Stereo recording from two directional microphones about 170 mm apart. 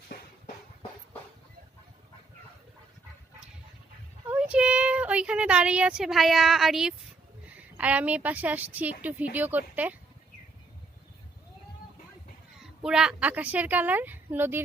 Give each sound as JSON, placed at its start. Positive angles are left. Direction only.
{"t": 0.1, "sound": "a sound", "side_deg": 60}
{"t": 4.3, "sound": "a woman's voice", "side_deg": -5}
{"t": 12.5, "sound": "a child's voice", "side_deg": -5}